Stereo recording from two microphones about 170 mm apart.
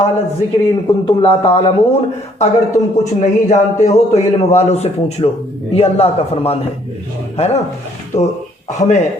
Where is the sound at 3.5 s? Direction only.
45° left (ahead or behind).